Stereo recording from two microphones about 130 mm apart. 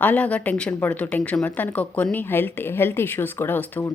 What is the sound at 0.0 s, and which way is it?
Speech, 10° left (ahead or behind).